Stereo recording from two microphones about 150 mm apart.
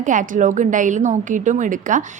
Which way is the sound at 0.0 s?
55° right (ahead or behind).